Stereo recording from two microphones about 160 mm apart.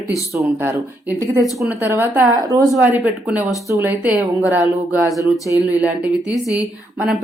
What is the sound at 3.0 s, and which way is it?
Speech, 10° right (ahead or behind).